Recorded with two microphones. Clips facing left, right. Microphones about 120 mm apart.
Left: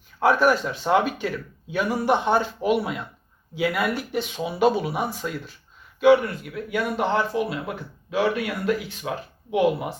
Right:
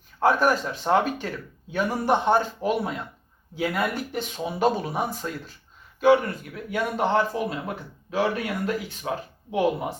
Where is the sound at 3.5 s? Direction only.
35° right (ahead or behind).